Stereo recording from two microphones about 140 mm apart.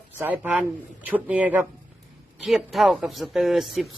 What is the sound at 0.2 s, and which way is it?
Speech, 15° right (ahead or behind).